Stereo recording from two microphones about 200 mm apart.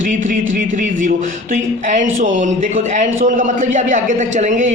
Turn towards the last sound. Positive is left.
turn(degrees=-40)  # may be behind; listen again after turning